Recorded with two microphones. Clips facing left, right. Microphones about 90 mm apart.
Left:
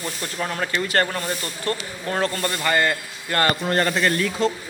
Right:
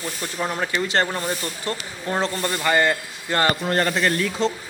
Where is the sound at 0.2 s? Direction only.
15° right (ahead or behind).